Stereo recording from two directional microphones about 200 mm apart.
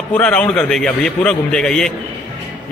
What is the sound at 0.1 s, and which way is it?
Speech, 5° left (ahead or behind).